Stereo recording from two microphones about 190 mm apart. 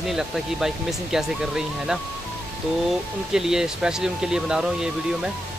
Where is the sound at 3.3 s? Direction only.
5° right (ahead or behind).